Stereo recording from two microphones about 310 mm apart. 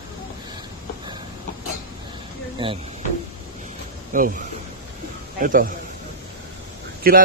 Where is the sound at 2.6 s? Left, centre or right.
Centre.